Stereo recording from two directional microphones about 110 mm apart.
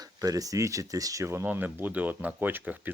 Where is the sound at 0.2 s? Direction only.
35° right (ahead or behind).